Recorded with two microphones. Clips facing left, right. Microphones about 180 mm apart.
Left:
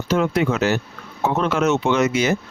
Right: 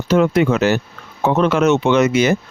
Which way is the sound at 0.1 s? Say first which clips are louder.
Right 5 dB; 70° right (ahead or behind).